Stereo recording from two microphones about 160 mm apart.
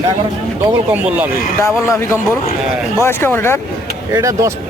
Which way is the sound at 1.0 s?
10° right (ahead or behind).